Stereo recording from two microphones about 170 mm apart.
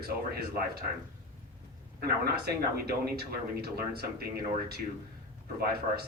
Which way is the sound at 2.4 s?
70° right (ahead or behind).